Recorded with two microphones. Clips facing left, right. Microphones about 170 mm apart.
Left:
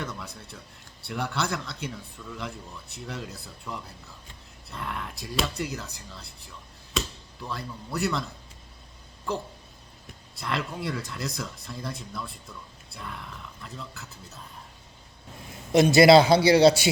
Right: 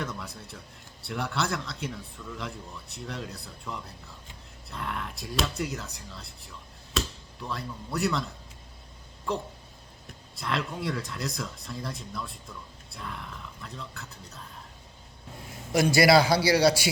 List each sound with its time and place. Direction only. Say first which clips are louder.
0.0 s speech: right 1 dB; centre (ahead or behind)
9.3 s speech: even; centre (ahead or behind)
15.7 s a man's voice: left 5 dB; 25° left (ahead or behind)